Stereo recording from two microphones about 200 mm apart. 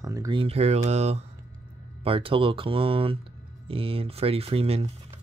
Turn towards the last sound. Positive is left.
turn(degrees=-30)  # may be behind; listen again after turning